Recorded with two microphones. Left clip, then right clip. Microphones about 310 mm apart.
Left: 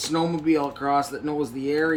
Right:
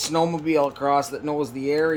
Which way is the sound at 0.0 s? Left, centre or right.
Right.